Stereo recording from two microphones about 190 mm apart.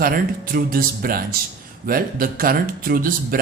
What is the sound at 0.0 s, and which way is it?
A man's voice, 50° right (ahead or behind).